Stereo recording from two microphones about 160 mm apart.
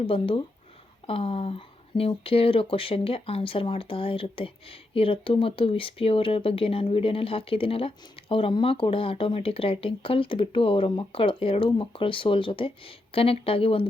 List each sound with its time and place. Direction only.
0.1 s speech: 35° left (ahead or behind)